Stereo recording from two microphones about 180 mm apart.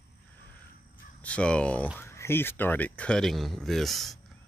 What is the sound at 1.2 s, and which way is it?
Speech, 5° left (ahead or behind).